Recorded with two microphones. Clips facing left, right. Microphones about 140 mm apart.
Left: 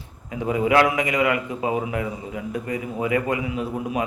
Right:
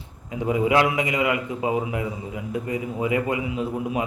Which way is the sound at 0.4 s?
20° right (ahead or behind).